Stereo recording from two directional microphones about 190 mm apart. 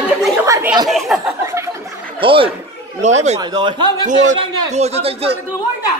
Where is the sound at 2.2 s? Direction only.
30° right (ahead or behind).